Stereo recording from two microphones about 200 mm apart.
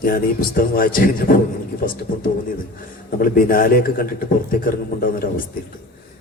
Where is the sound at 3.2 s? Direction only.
45° left (ahead or behind).